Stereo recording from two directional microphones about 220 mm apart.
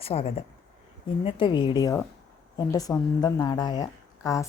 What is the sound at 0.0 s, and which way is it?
Speech, 25° left (ahead or behind).